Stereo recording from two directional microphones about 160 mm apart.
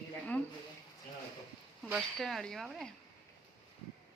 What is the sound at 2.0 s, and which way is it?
Speech, centre (ahead or behind).